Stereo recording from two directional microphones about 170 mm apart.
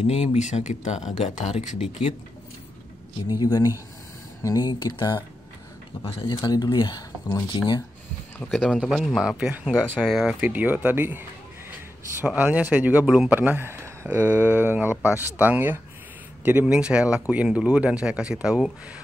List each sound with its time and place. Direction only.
0.0 s speech: 40° left (ahead or behind)
3.3 s speech: 20° left (ahead or behind)
6.3 s speech: 20° left (ahead or behind)
8.5 s speech: centre (ahead or behind)
10.4 s speech: 10° right (ahead or behind)